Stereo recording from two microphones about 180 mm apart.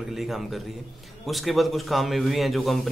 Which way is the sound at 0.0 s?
Centre (ahead or behind).